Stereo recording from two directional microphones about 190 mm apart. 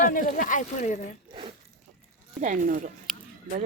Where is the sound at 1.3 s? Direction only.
30° right (ahead or behind).